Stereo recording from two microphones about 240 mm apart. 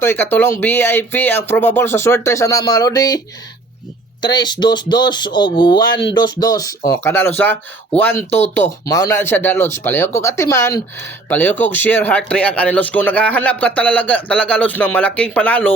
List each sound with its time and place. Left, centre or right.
0.0 s speech: centre
4.2 s speech: centre